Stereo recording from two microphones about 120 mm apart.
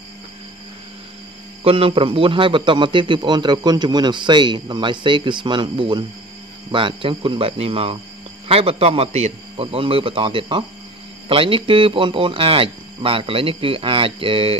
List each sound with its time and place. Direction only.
1.6 s a man's voice: 50° right (ahead or behind)